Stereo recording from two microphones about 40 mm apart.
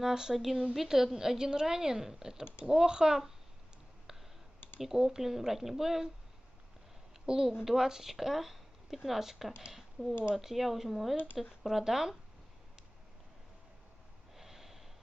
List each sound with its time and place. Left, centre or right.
0.0 s speech: centre
4.1 s clicking: centre
4.7 s speech: centre
7.2 s speech: centre
14.3 s snort: centre